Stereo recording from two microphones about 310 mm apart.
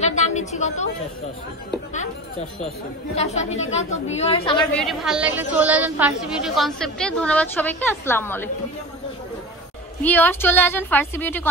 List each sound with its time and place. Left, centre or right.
0.0 s a sound: left
3.2 s a woman's voice: left
4.7 s a woman's voice: centre
10.0 s a woman's voice: centre